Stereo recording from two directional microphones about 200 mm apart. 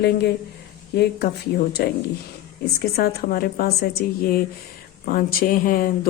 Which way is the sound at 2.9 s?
50° left (ahead or behind).